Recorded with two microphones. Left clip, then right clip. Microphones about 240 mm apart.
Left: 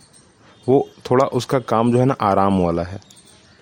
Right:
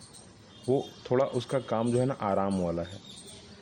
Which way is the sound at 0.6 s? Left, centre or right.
Left.